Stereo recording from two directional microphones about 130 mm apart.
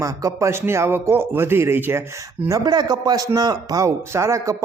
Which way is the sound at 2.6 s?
30° right (ahead or behind).